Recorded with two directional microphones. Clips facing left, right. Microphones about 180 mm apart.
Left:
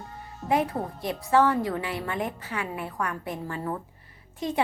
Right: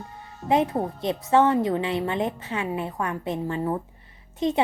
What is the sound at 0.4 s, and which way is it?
A woman's voice, 25° right (ahead or behind).